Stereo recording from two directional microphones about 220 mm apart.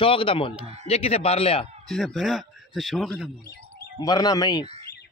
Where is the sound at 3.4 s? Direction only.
45° left (ahead or behind).